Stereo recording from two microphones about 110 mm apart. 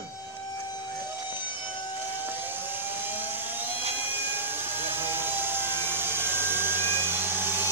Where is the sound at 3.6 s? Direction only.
20° right (ahead or behind).